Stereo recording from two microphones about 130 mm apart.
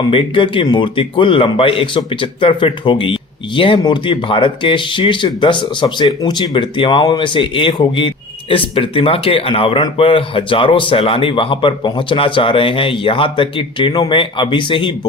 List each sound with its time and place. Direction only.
0.0 s speech: 45° left (ahead or behind)